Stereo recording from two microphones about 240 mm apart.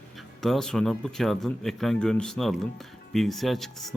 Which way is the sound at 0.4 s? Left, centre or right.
Centre.